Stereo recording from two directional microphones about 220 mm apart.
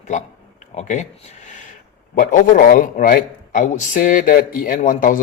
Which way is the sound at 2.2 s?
35° left (ahead or behind).